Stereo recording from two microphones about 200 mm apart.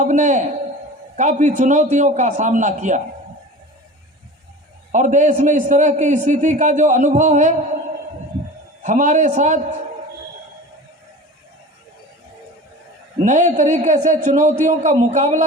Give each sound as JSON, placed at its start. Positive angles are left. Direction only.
{"t": 0.0, "sound": "a man's voice", "side_deg": -40}
{"t": 4.9, "sound": "a man's voice", "side_deg": -40}
{"t": 8.8, "sound": "a man's voice", "side_deg": -40}
{"t": 13.2, "sound": "a man's voice", "side_deg": -40}